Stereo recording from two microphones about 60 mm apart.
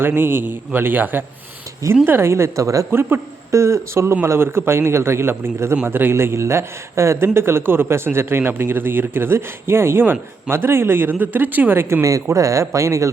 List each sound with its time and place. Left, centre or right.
0.0 s a man's voice: right
2.0 s a man's voice: right
2.9 s a man's voice: right
3.5 s a man's voice: right
12.0 s speech: right